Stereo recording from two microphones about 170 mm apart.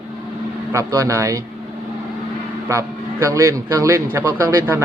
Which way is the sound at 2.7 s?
15° right (ahead or behind).